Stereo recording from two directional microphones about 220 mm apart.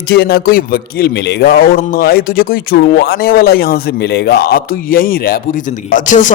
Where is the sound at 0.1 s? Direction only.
45° left (ahead or behind).